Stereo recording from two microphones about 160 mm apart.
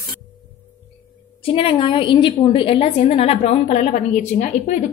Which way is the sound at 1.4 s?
35° left (ahead or behind).